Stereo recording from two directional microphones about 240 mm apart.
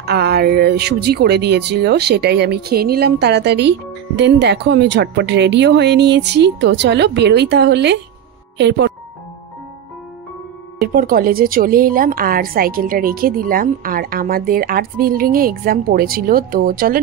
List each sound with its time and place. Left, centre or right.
0.0 s speech: right
10.8 s a woman's voice: right